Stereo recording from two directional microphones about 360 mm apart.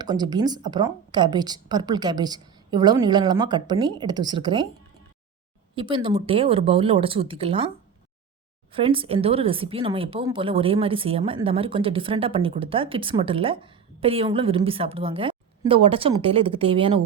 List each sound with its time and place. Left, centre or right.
0.0 s speech: centre
5.7 s speech: centre
8.7 s speech: centre